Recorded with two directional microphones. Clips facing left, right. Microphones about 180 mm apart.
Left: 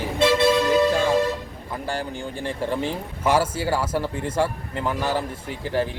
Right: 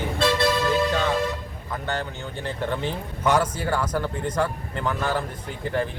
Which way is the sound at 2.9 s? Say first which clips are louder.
Right 1 dB; 5° left (ahead or behind).